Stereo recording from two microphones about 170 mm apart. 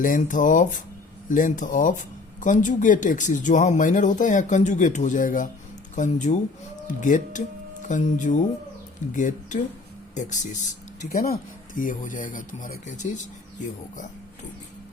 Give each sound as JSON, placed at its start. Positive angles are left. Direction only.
{"t": 0.0, "sound": "speech", "side_deg": 50}
{"t": 11.1, "sound": "speech", "side_deg": 60}